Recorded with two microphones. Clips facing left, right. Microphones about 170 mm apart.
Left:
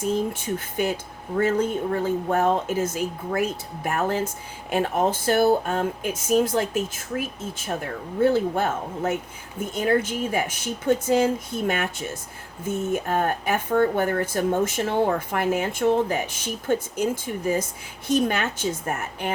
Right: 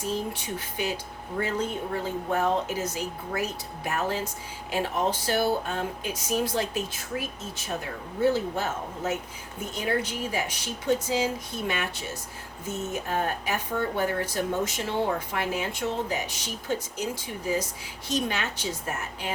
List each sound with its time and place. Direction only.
0.0 s speech: 50° left (ahead or behind)
8.2 s speech: 55° left (ahead or behind)